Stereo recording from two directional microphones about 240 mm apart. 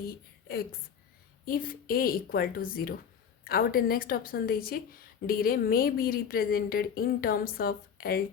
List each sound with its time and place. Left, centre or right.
1.5 s a woman's voice: left